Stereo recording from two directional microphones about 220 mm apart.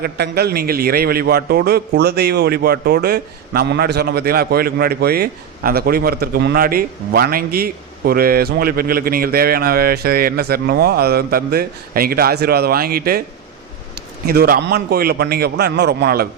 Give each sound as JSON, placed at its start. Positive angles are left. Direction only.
{"t": 0.0, "sound": "a man's voice", "side_deg": -45}
{"t": 14.3, "sound": "a man's voice", "side_deg": -45}